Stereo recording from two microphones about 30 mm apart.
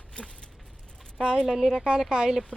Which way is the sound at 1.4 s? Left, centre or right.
Centre.